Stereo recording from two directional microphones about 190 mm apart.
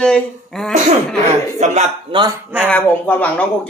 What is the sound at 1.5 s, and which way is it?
Speech, 35° right (ahead or behind).